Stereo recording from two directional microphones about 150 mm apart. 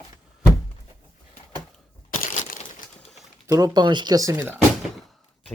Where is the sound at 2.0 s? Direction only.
60° left (ahead or behind).